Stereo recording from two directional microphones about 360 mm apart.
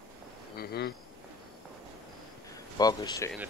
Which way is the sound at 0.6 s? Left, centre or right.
Left.